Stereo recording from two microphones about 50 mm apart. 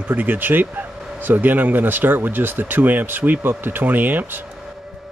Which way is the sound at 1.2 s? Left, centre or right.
Right.